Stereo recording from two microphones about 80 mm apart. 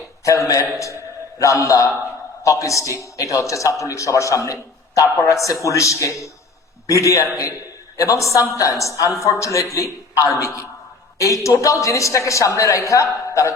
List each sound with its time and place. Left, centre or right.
0.3 s a man's voice: left